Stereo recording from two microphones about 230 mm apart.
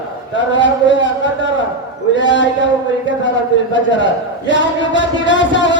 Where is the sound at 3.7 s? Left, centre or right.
Left.